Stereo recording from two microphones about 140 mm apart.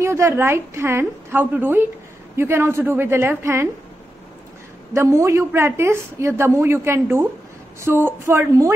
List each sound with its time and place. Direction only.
0.0 s a woman's voice: 20° right (ahead or behind)
4.9 s a woman's voice: 20° right (ahead or behind)